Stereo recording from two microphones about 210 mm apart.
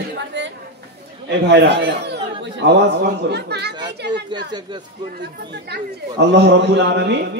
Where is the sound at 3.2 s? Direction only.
50° right (ahead or behind).